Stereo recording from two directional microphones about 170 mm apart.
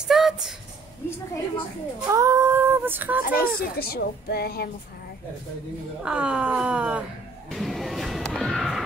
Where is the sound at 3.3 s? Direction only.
65° left (ahead or behind).